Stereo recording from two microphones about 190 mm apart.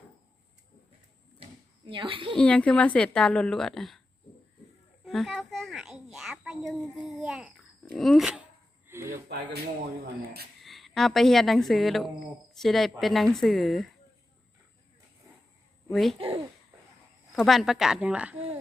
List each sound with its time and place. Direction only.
1.4 s a sound: 25° right (ahead or behind)
2.3 s a woman's voice: 5° left (ahead or behind)
5.0 s a sound: centre (ahead or behind)
7.9 s a woman's voice: centre (ahead or behind)
8.9 s a sound: 15° right (ahead or behind)
10.6 s a woman's voice: centre (ahead or behind)
15.9 s a woman's voice: centre (ahead or behind)
16.1 s a child's voice: 30° right (ahead or behind)
17.3 s a woman's voice: centre (ahead or behind)